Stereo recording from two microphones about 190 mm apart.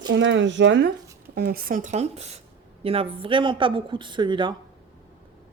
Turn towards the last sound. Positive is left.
turn(degrees=-25)  # may be behind; listen again after turning